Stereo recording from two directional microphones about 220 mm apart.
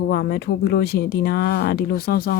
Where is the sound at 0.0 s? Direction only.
45° left (ahead or behind).